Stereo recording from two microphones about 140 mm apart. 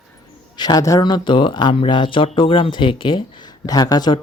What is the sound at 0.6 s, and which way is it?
Speech, 25° left (ahead or behind).